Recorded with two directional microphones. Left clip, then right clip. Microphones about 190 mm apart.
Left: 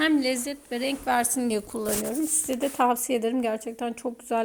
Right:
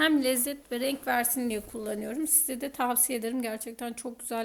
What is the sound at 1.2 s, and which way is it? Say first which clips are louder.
Speech: left 4 dB; 20° left (ahead or behind).